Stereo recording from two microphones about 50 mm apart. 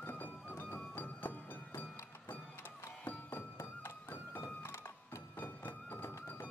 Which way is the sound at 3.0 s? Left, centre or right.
Left.